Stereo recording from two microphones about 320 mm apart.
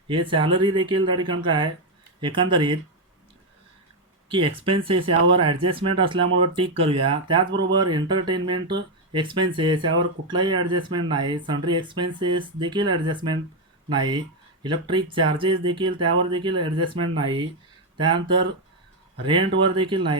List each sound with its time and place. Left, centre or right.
0.3 s speech: centre
4.3 s speech: centre